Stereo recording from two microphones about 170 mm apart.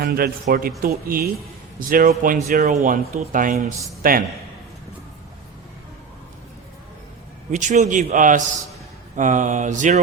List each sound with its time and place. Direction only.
0.0 s speech: 60° right (ahead or behind)
7.5 s speech: 45° right (ahead or behind)